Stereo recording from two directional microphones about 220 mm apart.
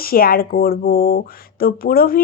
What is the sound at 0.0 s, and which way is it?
Speech, 40° left (ahead or behind).